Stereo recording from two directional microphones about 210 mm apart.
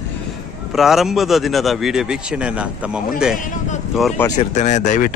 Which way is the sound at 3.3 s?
35° left (ahead or behind).